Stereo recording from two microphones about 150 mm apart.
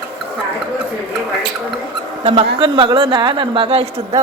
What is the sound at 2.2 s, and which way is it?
Speech, 30° right (ahead or behind).